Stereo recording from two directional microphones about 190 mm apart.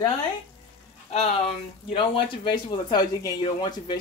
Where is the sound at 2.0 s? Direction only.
25° left (ahead or behind).